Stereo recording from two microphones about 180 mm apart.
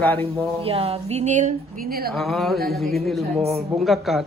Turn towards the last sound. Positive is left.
turn(degrees=0)  # may be behind; listen again after turning